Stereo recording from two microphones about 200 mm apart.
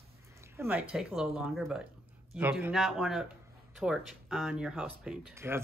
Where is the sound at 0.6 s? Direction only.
5° right (ahead or behind).